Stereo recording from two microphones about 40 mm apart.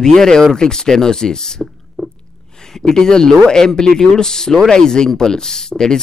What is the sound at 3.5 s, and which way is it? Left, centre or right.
Speech, centre.